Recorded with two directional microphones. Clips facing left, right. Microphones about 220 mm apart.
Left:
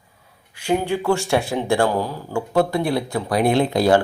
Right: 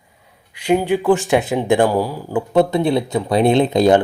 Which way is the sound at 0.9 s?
15° right (ahead or behind).